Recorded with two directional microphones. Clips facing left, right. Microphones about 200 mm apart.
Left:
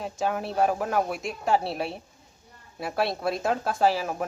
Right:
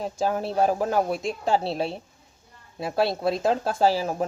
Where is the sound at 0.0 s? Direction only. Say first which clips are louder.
Right 3 dB; 35° right (ahead or behind).